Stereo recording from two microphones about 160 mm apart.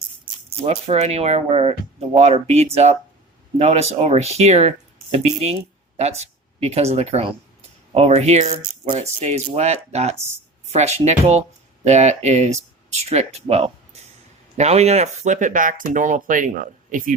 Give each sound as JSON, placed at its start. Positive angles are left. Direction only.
{"t": 0.6, "sound": "speech", "side_deg": -45}